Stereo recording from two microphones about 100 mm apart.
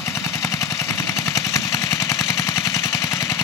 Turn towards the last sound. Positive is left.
turn(degrees=30)  # may be behind; listen again after turning